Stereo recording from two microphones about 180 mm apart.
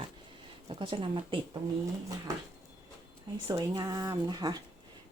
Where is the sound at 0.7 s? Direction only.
30° right (ahead or behind).